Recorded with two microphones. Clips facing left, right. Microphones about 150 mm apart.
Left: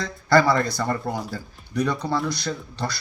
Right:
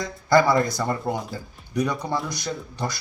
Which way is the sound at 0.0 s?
15° right (ahead or behind).